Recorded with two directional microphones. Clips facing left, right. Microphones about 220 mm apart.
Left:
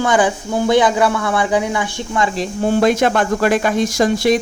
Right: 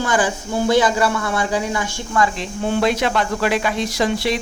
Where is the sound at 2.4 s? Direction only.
40° left (ahead or behind).